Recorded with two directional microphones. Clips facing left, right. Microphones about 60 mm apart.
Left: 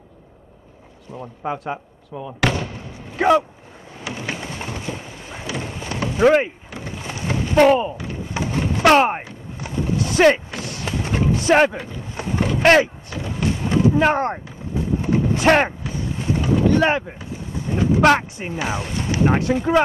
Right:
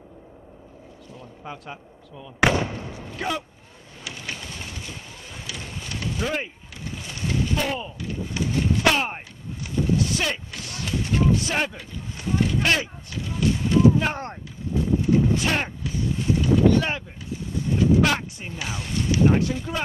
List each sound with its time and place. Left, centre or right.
1.1 s speech: left
2.4 s speech: right
2.9 s a sound: left
4.0 s vehicle: left
5.7 s clip-clop: left
6.2 s a sound: left
8.8 s speech: left
9.6 s vehicle: left
10.2 s a sound: left
14.0 s speech: left
15.0 s vehicle: left
16.3 s boat: left
17.6 s speech: left